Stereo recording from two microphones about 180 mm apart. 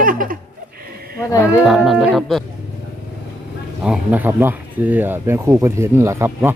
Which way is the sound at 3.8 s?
5° right (ahead or behind).